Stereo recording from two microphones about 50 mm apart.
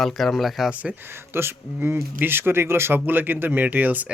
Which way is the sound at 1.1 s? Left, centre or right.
Right.